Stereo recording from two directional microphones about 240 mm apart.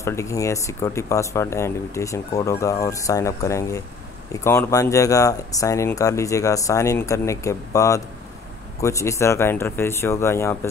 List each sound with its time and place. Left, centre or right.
0.0 s speech: centre